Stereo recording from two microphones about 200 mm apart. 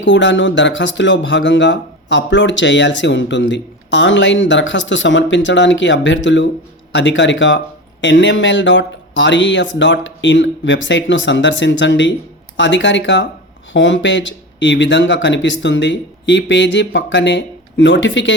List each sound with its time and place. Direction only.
0.0 s speech: 65° left (ahead or behind)